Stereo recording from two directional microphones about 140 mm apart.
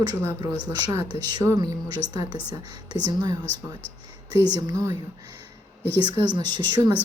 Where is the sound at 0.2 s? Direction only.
25° right (ahead or behind).